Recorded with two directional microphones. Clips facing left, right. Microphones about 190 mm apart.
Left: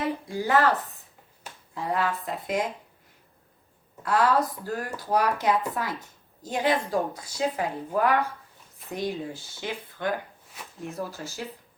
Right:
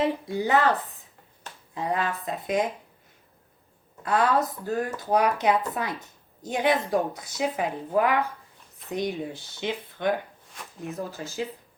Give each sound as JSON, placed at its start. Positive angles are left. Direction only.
{"t": 0.0, "sound": "speech", "side_deg": -20}
{"t": 1.7, "sound": "speech", "side_deg": -20}
{"t": 4.0, "sound": "speech", "side_deg": -20}